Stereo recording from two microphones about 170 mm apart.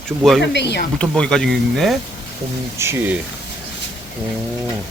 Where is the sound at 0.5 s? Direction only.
80° left.